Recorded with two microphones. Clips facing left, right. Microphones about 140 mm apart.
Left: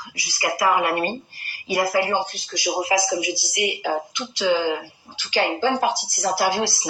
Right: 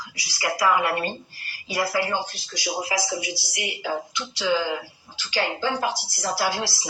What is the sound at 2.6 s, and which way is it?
Speech, 50° left (ahead or behind).